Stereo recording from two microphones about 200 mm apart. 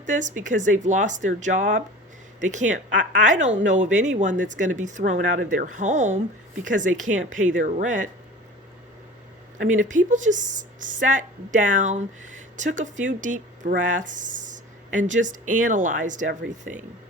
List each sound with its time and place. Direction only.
0.0 s a woman's voice: 40° right (ahead or behind)
9.6 s a woman's voice: 40° right (ahead or behind)